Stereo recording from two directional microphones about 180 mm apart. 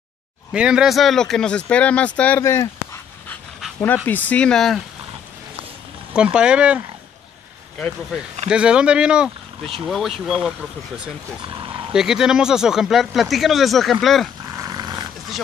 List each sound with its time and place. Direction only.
0.5 s speech: 5° right (ahead or behind)
6.1 s speech: 5° right (ahead or behind)
8.5 s speech: 5° right (ahead or behind)
11.4 s a sound: 25° right (ahead or behind)
11.9 s speech: 5° right (ahead or behind)
14.5 s dog: 20° right (ahead or behind)